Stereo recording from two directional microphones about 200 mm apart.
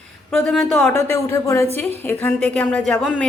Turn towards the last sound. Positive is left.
turn(degrees=0)  # may be behind; listen again after turning